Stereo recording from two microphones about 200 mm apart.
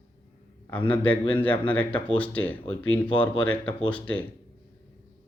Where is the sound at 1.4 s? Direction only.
5° left (ahead or behind).